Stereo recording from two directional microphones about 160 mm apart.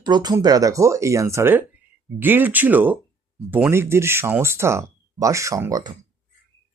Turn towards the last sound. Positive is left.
turn(degrees=-25)  # may be behind; listen again after turning